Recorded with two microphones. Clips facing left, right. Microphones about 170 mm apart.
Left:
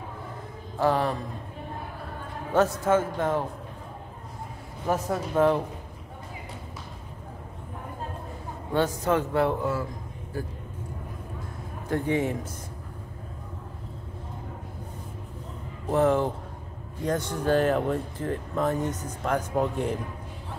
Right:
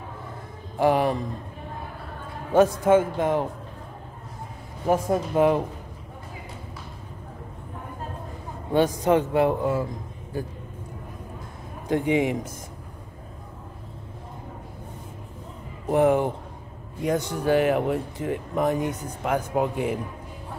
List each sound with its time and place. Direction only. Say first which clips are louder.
0.7 s speech: right 3 dB; 15° right (ahead or behind)
2.5 s speech: right 5 dB; 15° right (ahead or behind)
4.8 s speech: right 5 dB; 10° right (ahead or behind)
8.7 s speech: right 4 dB; 15° right (ahead or behind)
11.9 s speech: right 4 dB; 15° right (ahead or behind)
15.9 s speech: right 3 dB; 15° right (ahead or behind)